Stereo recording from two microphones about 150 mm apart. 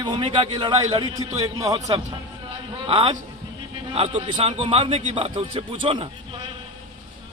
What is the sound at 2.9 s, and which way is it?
A man's voice, 35° right (ahead or behind).